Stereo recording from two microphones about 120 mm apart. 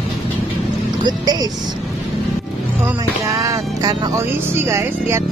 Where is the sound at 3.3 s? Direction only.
25° right (ahead or behind).